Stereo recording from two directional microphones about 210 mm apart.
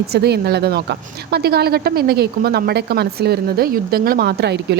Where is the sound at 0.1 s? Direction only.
50° right (ahead or behind).